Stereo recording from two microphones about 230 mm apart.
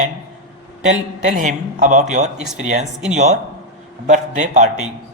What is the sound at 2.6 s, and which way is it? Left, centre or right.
A woman's voice, right.